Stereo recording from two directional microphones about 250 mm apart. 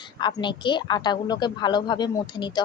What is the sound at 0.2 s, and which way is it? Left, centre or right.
A woman's voice, centre.